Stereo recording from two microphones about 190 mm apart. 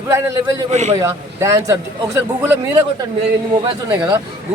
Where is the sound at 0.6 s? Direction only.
40° right (ahead or behind).